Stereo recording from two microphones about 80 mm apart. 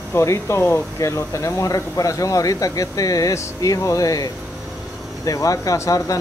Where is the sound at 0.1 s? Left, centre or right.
Left.